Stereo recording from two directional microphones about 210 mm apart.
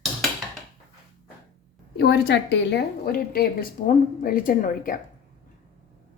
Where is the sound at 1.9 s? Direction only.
50° left (ahead or behind).